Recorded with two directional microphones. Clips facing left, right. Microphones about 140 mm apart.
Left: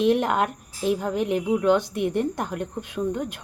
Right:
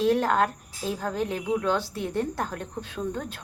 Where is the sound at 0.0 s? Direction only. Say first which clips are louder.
Left 2 dB; 20° left (ahead or behind).